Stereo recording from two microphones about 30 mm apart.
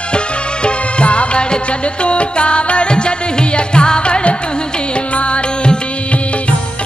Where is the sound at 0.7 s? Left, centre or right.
Left.